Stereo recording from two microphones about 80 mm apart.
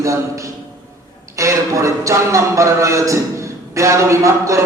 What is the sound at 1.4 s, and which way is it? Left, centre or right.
Speech, right.